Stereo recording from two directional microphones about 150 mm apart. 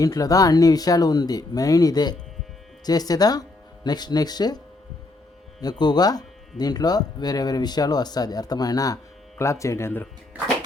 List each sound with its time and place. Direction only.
0.0 s speech: 25° left (ahead or behind)
5.8 s speech: 25° left (ahead or behind)
10.3 s a sound: 10° right (ahead or behind)